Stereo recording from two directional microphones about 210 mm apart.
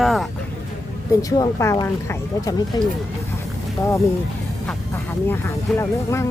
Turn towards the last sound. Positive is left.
turn(degrees=10)  # may be behind; listen again after turning